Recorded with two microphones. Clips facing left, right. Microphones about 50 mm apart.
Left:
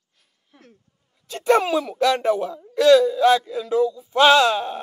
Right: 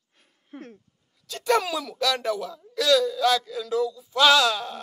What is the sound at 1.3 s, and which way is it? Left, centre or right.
Speech, left.